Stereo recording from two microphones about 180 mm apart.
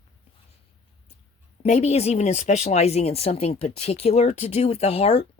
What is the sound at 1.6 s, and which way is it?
Speech, 35° left (ahead or behind).